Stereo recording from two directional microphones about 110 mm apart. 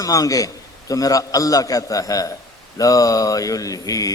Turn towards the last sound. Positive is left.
turn(degrees=30)  # may be behind; listen again after turning